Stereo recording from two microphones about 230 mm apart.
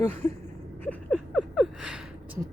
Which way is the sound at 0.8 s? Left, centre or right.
Centre.